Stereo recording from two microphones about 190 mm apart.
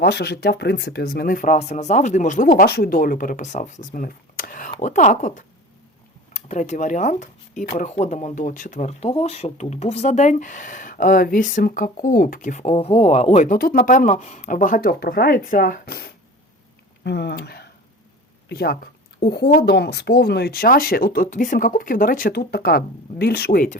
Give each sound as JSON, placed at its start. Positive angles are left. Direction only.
{"t": 0.0, "sound": "speech", "side_deg": 60}